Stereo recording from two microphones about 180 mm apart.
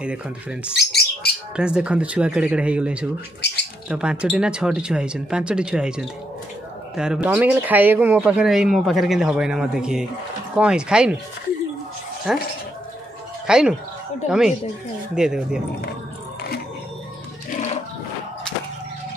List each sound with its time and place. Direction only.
0.0 s speech: 5° right (ahead or behind)
0.7 s bird: 65° left (ahead or behind)
1.6 s speech: 5° right (ahead or behind)
3.3 s a sound: 70° left (ahead or behind)
3.9 s speech: 5° right (ahead or behind)
12.3 s speech: 5° right (ahead or behind)
13.5 s speech: 5° right (ahead or behind)
15.1 s speech: 5° right (ahead or behind)